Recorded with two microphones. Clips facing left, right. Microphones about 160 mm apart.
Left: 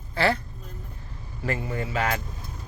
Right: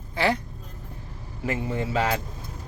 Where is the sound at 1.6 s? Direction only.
30° right (ahead or behind).